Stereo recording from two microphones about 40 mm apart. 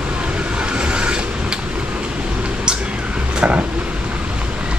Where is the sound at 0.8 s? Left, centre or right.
Right.